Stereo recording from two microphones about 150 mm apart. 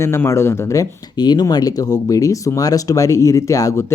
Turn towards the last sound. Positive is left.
turn(degrees=20)  # may be behind; listen again after turning